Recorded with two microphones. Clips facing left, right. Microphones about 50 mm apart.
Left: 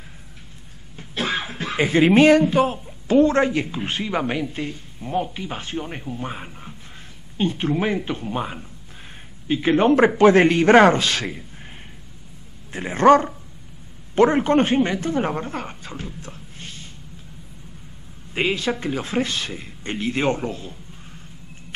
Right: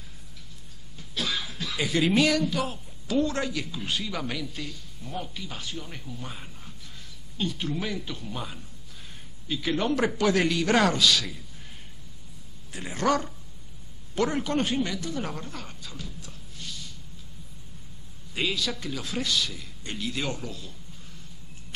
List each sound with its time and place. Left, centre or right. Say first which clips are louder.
0.9 s speech: left 6 dB; left
12.7 s speech: left 11 dB; left
18.3 s speech: left 7 dB; left